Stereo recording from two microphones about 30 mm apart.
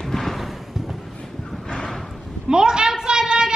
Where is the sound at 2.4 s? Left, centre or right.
Right.